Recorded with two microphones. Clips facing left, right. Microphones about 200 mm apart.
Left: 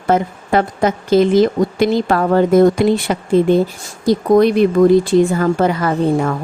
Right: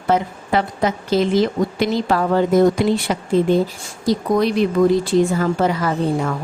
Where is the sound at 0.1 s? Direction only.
50° left (ahead or behind).